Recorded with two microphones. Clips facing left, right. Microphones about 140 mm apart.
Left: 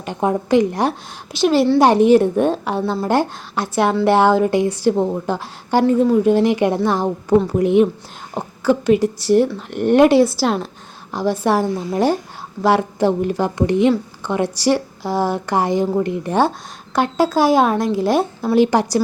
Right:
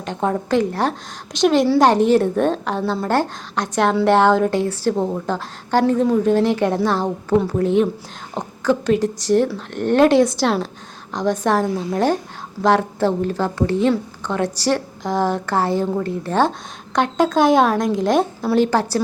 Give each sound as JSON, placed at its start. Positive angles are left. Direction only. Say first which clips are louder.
{"t": 0.0, "sound": "a woman's voice", "louder": "left 2 dB", "side_deg": 10}
{"t": 1.8, "sound": "a woman's voice", "louder": "left 5 dB", "side_deg": 10}